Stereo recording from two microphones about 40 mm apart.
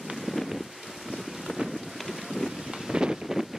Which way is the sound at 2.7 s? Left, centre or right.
Centre.